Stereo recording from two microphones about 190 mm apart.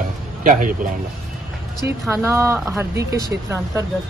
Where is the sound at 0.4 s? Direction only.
45° right (ahead or behind).